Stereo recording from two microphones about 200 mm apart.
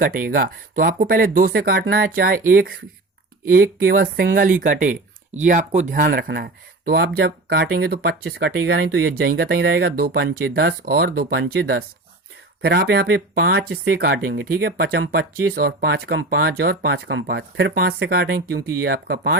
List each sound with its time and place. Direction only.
0.0 s speech: 45° right (ahead or behind)